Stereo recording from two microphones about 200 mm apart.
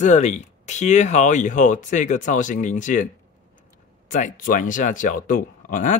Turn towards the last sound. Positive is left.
turn(degrees=40)  # may be behind; listen again after turning